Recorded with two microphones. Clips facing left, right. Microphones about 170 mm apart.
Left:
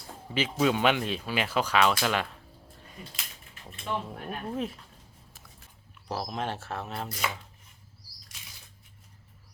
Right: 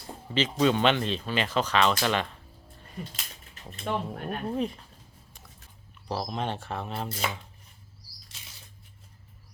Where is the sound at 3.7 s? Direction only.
40° right (ahead or behind).